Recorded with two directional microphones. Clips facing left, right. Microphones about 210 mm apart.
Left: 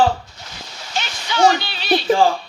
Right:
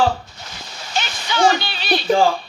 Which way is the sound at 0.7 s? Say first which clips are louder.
Right 2 dB; 50° right (ahead or behind).